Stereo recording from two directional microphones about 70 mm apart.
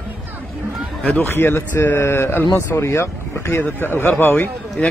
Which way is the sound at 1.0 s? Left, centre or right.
Left.